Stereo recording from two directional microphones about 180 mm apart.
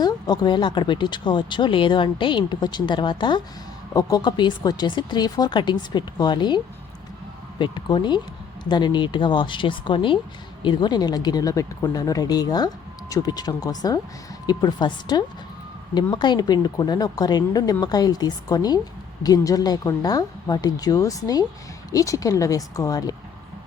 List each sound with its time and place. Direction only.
0.0 s speech: 25° left (ahead or behind)
7.6 s speech: 25° left (ahead or behind)